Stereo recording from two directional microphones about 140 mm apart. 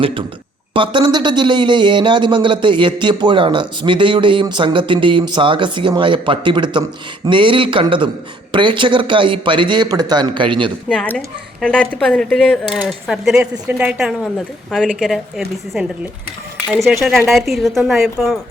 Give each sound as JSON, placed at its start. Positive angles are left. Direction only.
{"t": 0.0, "sound": "speech", "side_deg": -40}
{"t": 10.8, "sound": "speech", "side_deg": 10}
{"t": 17.2, "sound": "speech", "side_deg": 0}